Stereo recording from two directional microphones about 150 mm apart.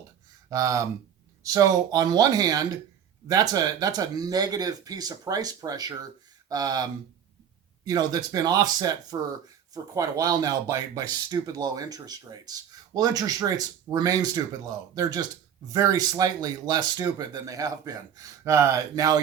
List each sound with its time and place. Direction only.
0.5 s speech: 25° right (ahead or behind)
7.9 s speech: 25° right (ahead or behind)